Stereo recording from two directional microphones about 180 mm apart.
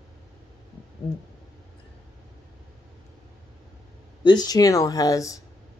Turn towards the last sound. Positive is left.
turn(degrees=20)  # may be behind; listen again after turning